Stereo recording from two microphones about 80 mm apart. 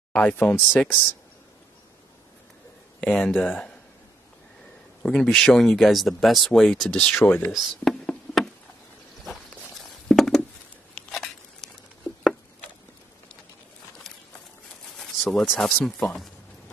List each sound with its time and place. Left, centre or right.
0.1 s speech: centre
3.0 s speech: centre
5.0 s speech: centre
7.2 s speech: left
7.5 s speech: centre
9.8 s a sound: centre
15.0 s a sound: centre
15.6 s speech: centre